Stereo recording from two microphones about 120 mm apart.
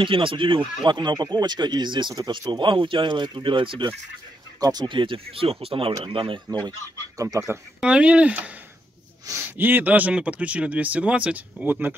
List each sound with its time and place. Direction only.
0.0 s speech: 45° right (ahead or behind)
4.6 s speech: 35° right (ahead or behind)
7.2 s speech: 30° right (ahead or behind)
7.8 s speech: 10° right (ahead or behind)